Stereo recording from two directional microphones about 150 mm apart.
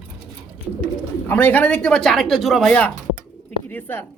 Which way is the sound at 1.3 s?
10° left (ahead or behind).